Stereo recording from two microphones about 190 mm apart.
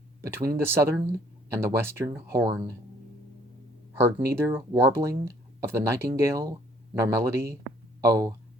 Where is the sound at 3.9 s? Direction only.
15° right (ahead or behind).